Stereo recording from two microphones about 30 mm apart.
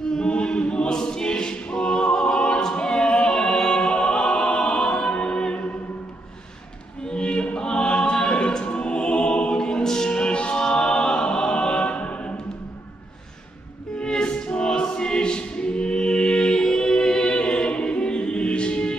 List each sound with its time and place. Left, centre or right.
0.1 s choir: left
4.8 s music: left
7.1 s a sound: left
7.5 s choir: left
9.6 s music: left
10.1 s a capella: left
13.9 s a capella: left
14.5 s choir: left; by 17.4 s centre
17.4 s music: left